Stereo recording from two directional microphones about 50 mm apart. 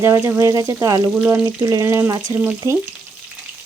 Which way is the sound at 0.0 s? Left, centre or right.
Right.